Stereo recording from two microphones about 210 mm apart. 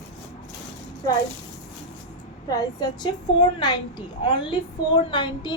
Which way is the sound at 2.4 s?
20° left (ahead or behind).